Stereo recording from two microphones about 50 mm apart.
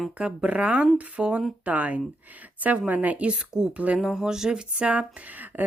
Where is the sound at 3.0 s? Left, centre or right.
Right.